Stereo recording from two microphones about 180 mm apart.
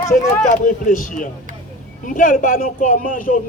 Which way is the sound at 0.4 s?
45° left (ahead or behind).